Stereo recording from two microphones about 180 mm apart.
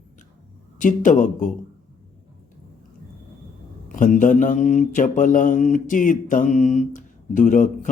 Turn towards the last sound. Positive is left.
turn(degrees=45)  # may be behind; listen again after turning